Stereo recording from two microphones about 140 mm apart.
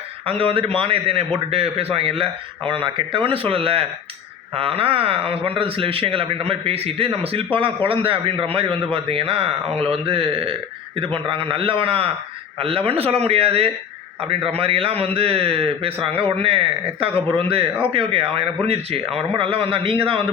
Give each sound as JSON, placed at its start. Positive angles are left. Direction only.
{"t": 0.3, "sound": "a man's voice", "side_deg": -40}